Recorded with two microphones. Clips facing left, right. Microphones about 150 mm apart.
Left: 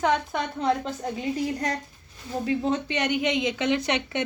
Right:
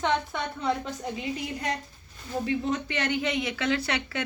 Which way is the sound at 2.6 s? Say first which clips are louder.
Left 3 dB; 25° left (ahead or behind).